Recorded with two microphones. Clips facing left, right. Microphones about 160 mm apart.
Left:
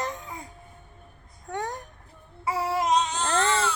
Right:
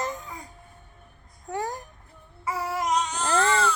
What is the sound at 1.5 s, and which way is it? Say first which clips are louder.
Speech: right 1 dB; centre (ahead or behind).